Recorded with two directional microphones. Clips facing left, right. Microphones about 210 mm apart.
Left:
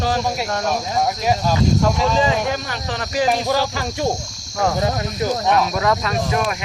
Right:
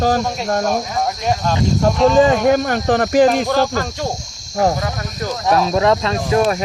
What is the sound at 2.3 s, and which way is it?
Speech, 50° right (ahead or behind).